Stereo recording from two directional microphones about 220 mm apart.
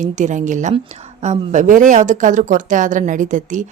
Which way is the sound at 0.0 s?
35° right (ahead or behind).